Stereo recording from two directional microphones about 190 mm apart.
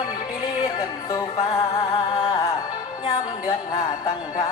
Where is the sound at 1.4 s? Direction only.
30° left (ahead or behind).